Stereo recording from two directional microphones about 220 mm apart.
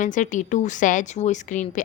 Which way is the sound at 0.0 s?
35° left (ahead or behind).